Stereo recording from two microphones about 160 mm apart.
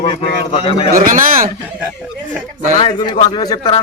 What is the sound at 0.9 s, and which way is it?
Speech, 60° right (ahead or behind).